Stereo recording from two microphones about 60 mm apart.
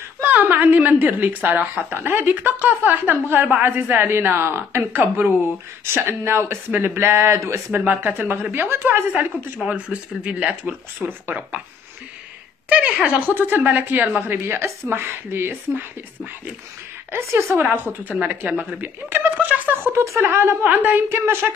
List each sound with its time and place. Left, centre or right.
0.2 s a woman's voice: right
5.9 s speech: right
7.7 s a woman's voice: right
9.7 s speech: centre
10.4 s speech: right
12.6 s speech: right
13.3 s a woman's voice: right
17.2 s speech: right
17.6 s a woman's voice: right
19.9 s speech: right
20.6 s a woman's voice: right